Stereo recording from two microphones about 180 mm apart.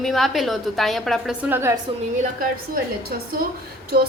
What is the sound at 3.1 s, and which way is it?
Speech, 60° right (ahead or behind).